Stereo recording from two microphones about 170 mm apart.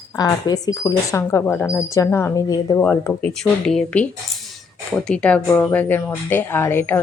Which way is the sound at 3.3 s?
5° left (ahead or behind).